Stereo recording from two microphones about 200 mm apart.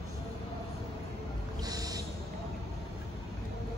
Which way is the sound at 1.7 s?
20° right (ahead or behind).